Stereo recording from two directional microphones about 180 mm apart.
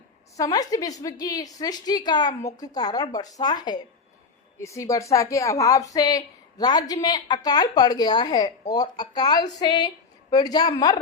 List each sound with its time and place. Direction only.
0.3 s a woman's voice: 20° left (ahead or behind)